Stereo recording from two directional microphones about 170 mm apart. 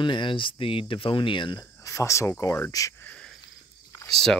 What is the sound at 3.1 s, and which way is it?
Cricket, 5° left (ahead or behind).